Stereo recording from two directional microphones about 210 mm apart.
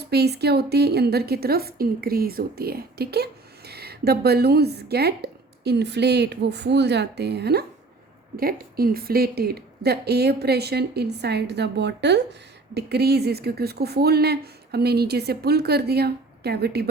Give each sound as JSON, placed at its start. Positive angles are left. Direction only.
{"t": 0.0, "sound": "a woman's voice", "side_deg": -50}